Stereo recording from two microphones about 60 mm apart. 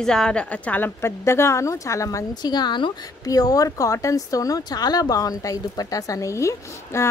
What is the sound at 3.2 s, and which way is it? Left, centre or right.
Speech, left.